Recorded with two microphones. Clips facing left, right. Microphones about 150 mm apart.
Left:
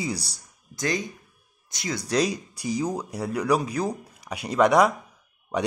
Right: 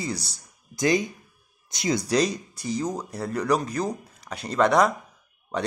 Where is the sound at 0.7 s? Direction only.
15° right (ahead or behind).